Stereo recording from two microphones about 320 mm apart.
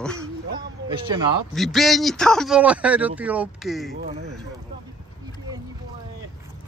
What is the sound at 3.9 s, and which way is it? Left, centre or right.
Speech, right.